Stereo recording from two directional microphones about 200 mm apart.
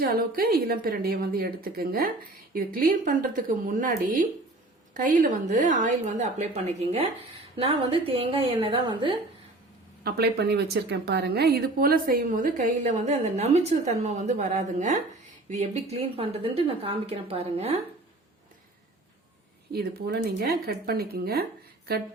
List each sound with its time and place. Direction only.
0.0 s a woman's voice: 45° right (ahead or behind); by 9.1 s 25° right (ahead or behind)
10.0 s a woman's voice: 50° right (ahead or behind); by 17.7 s 30° right (ahead or behind)
19.7 s a woman's voice: 50° right (ahead or behind)